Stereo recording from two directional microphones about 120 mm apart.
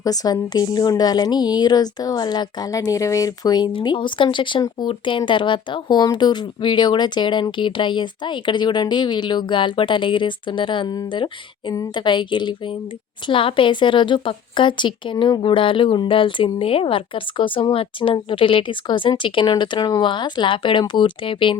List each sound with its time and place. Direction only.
0.0 s a woman's voice: 30° left (ahead or behind)